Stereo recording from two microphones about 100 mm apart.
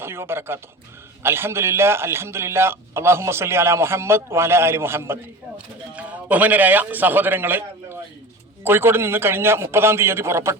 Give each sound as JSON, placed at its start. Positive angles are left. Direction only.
{"t": 0.0, "sound": "a man's voice", "side_deg": -25}
{"t": 5.5, "sound": "a man's voice", "side_deg": -15}